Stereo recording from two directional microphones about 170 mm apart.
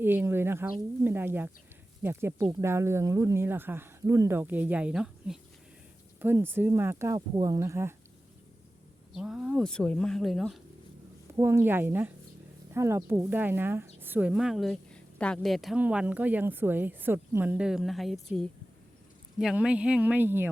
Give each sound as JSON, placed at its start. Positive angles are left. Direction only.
{"t": 0.0, "sound": "speech", "side_deg": -10}
{"t": 9.1, "sound": "speech", "side_deg": -5}
{"t": 11.3, "sound": "speech", "side_deg": -15}